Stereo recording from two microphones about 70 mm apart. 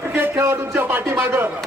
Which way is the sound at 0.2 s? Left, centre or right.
Right.